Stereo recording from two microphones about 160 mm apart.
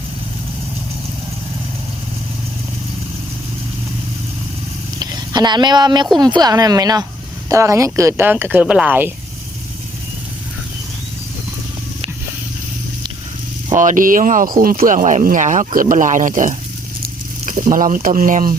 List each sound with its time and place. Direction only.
4.9 s a woman's voice: 25° right (ahead or behind)
13.7 s speech: 55° right (ahead or behind)